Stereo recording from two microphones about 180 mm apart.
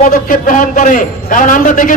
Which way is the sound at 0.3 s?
45° left (ahead or behind).